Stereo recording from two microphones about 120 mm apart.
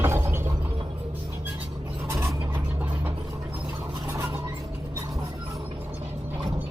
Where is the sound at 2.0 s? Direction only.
25° right (ahead or behind).